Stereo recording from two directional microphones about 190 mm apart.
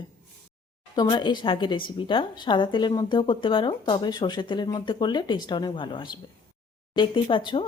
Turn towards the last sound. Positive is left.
turn(degrees=25)  # may be behind; listen again after turning